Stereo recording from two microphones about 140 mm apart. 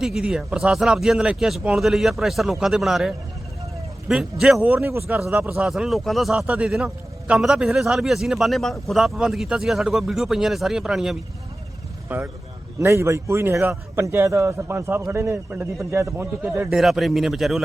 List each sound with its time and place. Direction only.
0.0 s a man's voice: 5° right (ahead or behind)
12.0 s a man's voice: 15° right (ahead or behind)
16.7 s speech: centre (ahead or behind)